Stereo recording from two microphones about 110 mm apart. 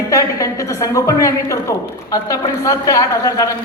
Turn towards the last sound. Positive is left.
turn(degrees=30)  # may be behind; listen again after turning